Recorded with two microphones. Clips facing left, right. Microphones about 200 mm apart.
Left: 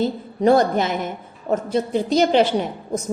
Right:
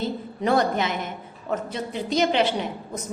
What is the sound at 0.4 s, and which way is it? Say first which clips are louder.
A woman's voice: left 6 dB; 40° left (ahead or behind).